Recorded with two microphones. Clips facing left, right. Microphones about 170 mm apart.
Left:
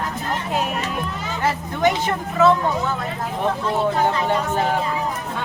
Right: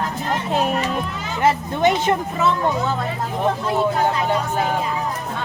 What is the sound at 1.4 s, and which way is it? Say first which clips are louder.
Speech: right 3 dB; 20° right (ahead or behind).